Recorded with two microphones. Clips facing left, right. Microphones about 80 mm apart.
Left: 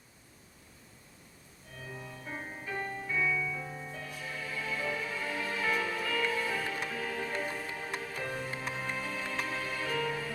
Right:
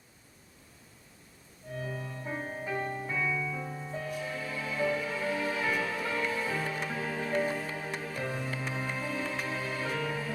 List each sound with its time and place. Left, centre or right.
1.7 s organ: centre
2.0 s music: right
2.2 s music: centre